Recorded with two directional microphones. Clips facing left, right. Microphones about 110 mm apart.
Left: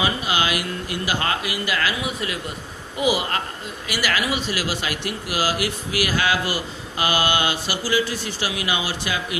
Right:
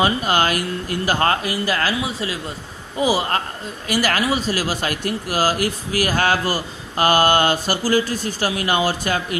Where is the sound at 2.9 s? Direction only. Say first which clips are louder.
Right 3 dB; 35° right (ahead or behind).